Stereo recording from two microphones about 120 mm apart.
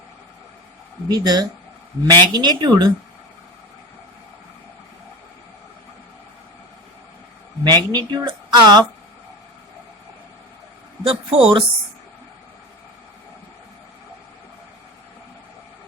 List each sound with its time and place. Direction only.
1.0 s a woman's voice: 35° right (ahead or behind)
7.6 s a woman's voice: 35° right (ahead or behind)
11.0 s speech: 50° right (ahead or behind)